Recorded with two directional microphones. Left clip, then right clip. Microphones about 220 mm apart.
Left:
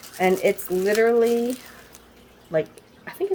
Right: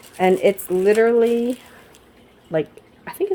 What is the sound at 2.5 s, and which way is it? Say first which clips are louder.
Drip: right 1 dB; 50° right (ahead or behind).